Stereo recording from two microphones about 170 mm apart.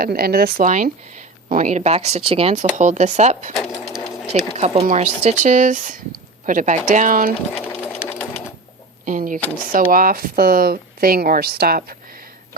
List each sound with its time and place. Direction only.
0.0 s speech: 60° right (ahead or behind)
0.7 s speech: 45° right (ahead or behind)
3.5 s sewing machine: centre (ahead or behind)
4.5 s speech: 40° right (ahead or behind)
7.5 s sewing machine: 10° left (ahead or behind)
9.0 s speech: 50° right (ahead or behind)